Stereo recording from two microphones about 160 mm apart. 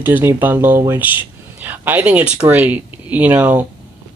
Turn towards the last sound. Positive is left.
turn(degrees=-10)  # may be behind; listen again after turning